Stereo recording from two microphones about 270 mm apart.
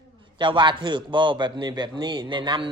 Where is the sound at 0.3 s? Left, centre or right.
Centre.